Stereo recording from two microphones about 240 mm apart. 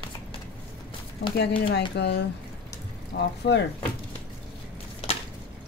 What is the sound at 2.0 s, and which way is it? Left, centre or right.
A woman's voice, left.